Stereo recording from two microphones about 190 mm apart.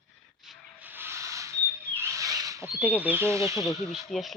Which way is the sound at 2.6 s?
5° right (ahead or behind).